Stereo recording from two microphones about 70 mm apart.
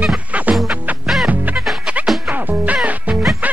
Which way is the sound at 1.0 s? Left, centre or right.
Centre.